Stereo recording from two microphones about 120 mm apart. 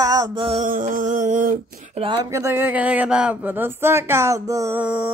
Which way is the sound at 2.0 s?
35° right (ahead or behind).